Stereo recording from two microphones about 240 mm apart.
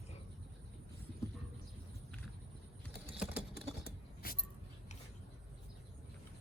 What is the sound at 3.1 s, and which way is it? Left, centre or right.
Typing, centre.